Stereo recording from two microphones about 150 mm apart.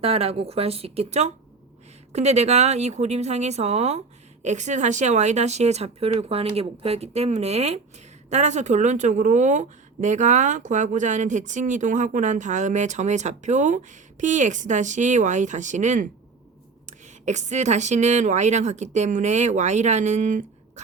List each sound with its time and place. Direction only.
0.0 s speech: 40° right (ahead or behind)